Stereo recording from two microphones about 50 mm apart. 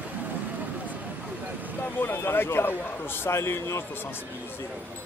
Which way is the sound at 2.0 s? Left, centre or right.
Left.